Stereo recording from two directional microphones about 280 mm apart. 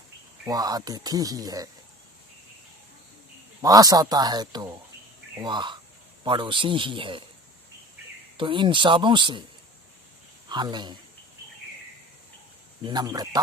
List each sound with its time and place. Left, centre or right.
0.4 s speech: centre
3.6 s speech: centre
8.4 s speech: centre
10.5 s speech: centre
12.8 s speech: centre